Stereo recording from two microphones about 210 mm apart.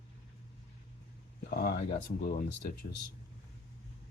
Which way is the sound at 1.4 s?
45° left (ahead or behind).